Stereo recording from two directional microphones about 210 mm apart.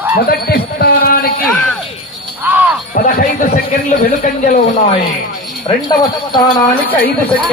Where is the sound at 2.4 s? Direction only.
10° right (ahead or behind).